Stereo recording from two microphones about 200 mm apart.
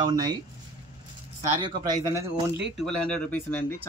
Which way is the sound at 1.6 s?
20° right (ahead or behind).